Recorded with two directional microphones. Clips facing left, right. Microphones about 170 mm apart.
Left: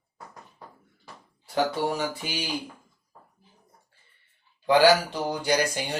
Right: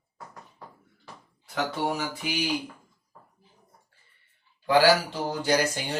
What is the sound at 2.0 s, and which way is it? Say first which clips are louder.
Speech: left 1 dB; 30° left (ahead or behind).